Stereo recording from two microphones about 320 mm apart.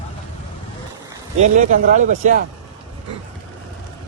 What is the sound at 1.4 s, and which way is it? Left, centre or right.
Speech, right.